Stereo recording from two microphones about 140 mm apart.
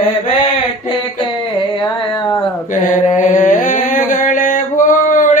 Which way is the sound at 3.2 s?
65° left (ahead or behind).